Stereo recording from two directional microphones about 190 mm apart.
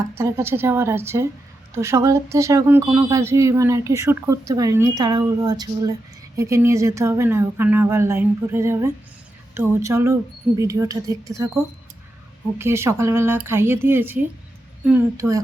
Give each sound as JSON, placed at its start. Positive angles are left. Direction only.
{"t": 0.2, "sound": "speech", "side_deg": -15}
{"t": 12.5, "sound": "speech", "side_deg": -15}